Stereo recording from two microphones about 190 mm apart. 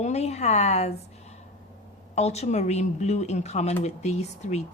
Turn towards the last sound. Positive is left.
turn(degrees=35)  # may be behind; listen again after turning